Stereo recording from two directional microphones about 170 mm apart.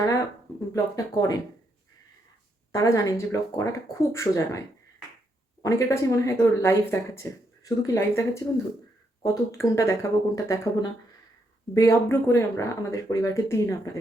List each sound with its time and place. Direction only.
0.7 s speech: 20° left (ahead or behind)
2.7 s speech: 20° left (ahead or behind)
5.6 s speech: 20° left (ahead or behind)